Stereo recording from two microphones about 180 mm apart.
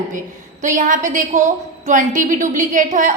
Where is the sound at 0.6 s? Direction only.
45° right (ahead or behind).